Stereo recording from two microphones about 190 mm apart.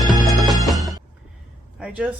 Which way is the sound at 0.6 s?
Centre (ahead or behind).